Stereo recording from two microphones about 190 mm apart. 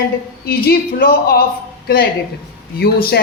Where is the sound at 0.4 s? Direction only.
55° left (ahead or behind).